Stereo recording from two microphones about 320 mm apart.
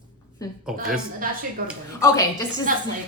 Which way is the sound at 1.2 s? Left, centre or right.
Right.